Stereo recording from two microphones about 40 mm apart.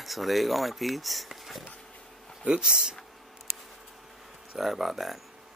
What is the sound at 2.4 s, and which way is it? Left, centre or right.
Speech, right.